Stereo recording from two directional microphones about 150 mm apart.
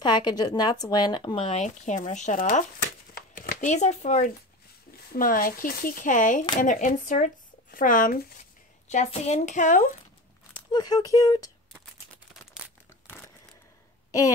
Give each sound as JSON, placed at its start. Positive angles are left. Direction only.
{"t": 0.0, "sound": "speech", "side_deg": 30}
{"t": 3.2, "sound": "a sound", "side_deg": 85}
{"t": 3.6, "sound": "a woman's voice", "side_deg": 50}
{"t": 5.1, "sound": "speech", "side_deg": 75}
{"t": 8.8, "sound": "a woman's voice", "side_deg": 50}
{"t": 10.7, "sound": "speech", "side_deg": 25}